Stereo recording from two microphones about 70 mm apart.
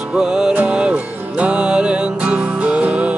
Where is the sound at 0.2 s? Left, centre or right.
Centre.